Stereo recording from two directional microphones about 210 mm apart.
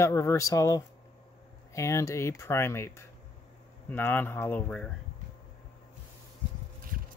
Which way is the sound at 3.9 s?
10° left (ahead or behind).